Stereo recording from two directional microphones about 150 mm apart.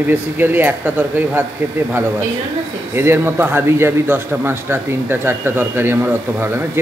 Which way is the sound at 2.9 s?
15° right (ahead or behind).